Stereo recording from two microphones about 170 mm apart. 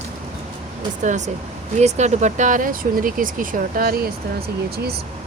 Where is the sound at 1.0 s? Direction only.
45° right (ahead or behind).